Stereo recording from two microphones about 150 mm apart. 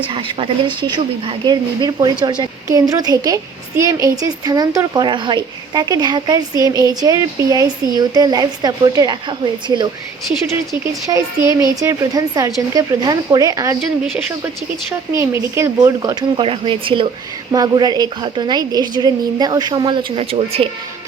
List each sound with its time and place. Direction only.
0.1 s a woman's voice: 35° right (ahead or behind)
11.1 s a woman's voice: 20° right (ahead or behind)
15.1 s speech: 20° right (ahead or behind)
16.4 s a woman's voice: 35° right (ahead or behind)